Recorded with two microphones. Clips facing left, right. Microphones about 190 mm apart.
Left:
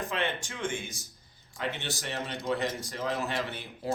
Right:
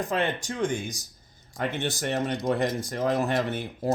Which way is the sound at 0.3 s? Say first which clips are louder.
Right 6 dB; 40° right (ahead or behind).